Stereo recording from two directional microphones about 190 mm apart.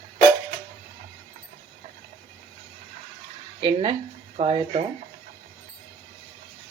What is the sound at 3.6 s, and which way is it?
Speech, 30° right (ahead or behind).